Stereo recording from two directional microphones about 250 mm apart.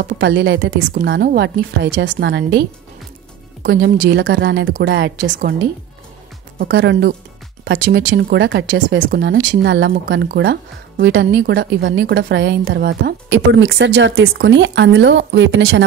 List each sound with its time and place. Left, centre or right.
0.0 s speech: right
3.6 s speech: right
6.7 s speech: right